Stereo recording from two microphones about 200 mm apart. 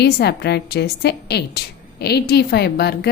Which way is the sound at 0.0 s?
55° left (ahead or behind).